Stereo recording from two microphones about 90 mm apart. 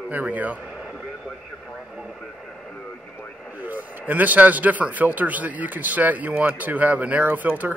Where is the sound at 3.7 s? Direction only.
20° right (ahead or behind).